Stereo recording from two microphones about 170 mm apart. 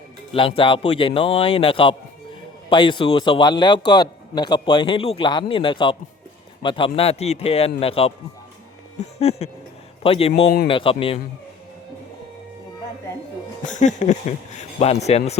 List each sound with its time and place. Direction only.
0.3 s a man's voice: 30° left (ahead or behind)
13.7 s a man's voice: 45° left (ahead or behind)